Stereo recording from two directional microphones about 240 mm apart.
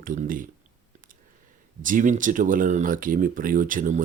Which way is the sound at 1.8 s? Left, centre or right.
Right.